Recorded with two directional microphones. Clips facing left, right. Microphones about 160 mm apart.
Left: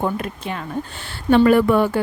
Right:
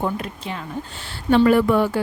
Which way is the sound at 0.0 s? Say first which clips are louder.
Left 2 dB; 55° left (ahead or behind).